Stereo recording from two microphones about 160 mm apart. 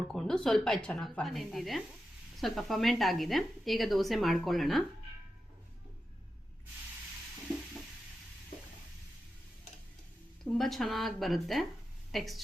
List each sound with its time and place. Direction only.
0.1 s a woman's voice: 5° left (ahead or behind)
10.4 s a woman's voice: centre (ahead or behind)